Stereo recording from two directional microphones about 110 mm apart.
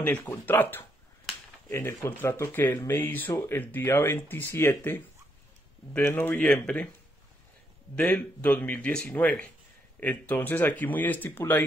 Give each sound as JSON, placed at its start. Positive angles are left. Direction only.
{"t": 0.0, "sound": "speech", "side_deg": 15}
{"t": 7.9, "sound": "speech", "side_deg": 15}